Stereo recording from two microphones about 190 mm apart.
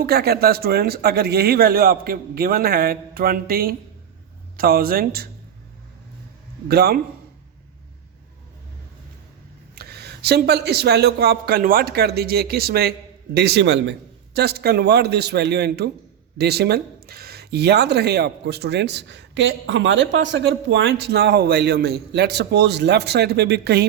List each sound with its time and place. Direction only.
0.0 s a man's voice: 55° right (ahead or behind)
6.7 s speech: 55° right (ahead or behind)
9.7 s speech: 60° right (ahead or behind)
14.3 s speech: 55° right (ahead or behind)